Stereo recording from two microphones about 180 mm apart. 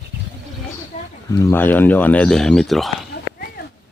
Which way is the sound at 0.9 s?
40° left (ahead or behind).